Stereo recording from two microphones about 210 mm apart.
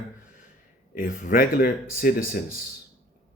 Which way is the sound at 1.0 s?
40° left (ahead or behind).